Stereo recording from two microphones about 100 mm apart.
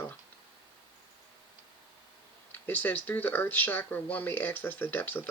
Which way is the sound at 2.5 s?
20° left (ahead or behind).